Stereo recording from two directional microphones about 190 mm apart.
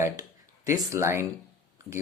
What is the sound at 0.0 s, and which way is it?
Speech, 15° right (ahead or behind).